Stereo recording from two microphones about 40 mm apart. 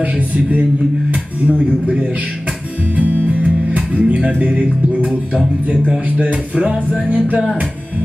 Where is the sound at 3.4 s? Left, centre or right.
Right.